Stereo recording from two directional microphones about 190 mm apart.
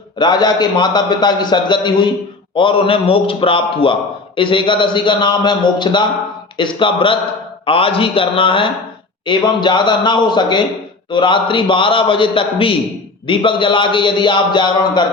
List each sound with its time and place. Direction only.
0.2 s a man's voice: 25° left (ahead or behind)